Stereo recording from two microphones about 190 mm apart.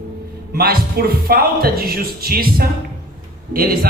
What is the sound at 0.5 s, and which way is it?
A woman's voice, 50° right (ahead or behind).